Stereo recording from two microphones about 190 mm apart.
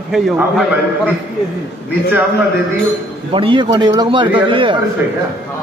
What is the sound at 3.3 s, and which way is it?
A man's voice, 25° right (ahead or behind).